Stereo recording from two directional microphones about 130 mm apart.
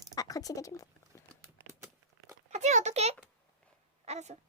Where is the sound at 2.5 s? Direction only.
60° right (ahead or behind).